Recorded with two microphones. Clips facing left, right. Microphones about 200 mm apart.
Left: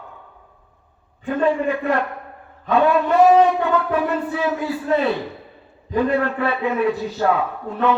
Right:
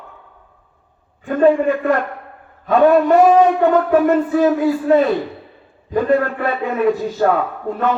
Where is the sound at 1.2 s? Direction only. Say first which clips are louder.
Right 6 dB; 45° right (ahead or behind).